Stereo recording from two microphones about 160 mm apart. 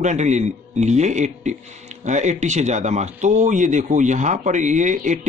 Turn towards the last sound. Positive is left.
turn(degrees=-50)  # may be behind; listen again after turning